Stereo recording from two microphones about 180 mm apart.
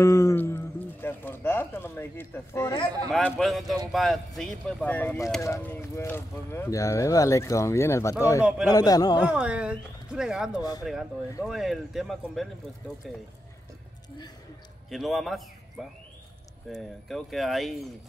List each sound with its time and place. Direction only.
0.0 s a man's voice: 15° left (ahead or behind)
9.2 s speech: 10° right (ahead or behind)
14.9 s speech: centre (ahead or behind)